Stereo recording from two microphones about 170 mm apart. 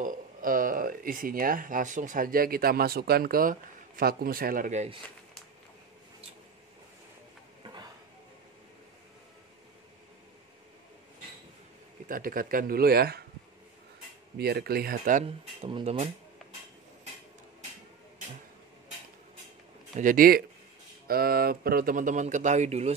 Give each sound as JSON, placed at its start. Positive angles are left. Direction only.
{"t": 0.0, "sound": "speech", "side_deg": -55}
{"t": 7.6, "sound": "a sound", "side_deg": -25}
{"t": 12.1, "sound": "speech", "side_deg": -55}
{"t": 14.4, "sound": "speech", "side_deg": -65}
{"t": 15.2, "sound": "speech", "side_deg": -35}
{"t": 20.0, "sound": "speech", "side_deg": -55}